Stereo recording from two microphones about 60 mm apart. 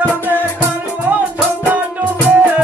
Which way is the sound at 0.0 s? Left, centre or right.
Left.